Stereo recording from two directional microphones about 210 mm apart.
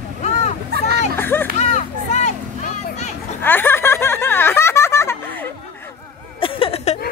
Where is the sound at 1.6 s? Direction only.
35° left (ahead or behind).